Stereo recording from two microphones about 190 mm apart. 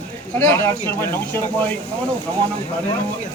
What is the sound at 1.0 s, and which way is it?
Speech, 10° left (ahead or behind).